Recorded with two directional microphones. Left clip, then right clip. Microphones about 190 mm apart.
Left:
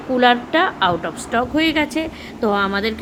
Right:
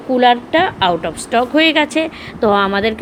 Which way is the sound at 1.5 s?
5° right (ahead or behind).